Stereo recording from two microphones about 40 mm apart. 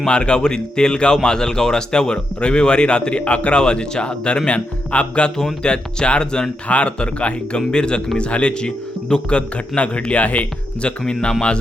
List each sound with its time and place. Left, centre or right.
0.0 s a man's voice: left
6.7 s a man's voice: left
9.7 s speech: left
11.0 s a man's voice: left